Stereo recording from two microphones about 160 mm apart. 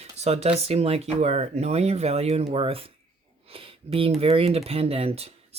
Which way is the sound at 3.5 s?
35° right (ahead or behind).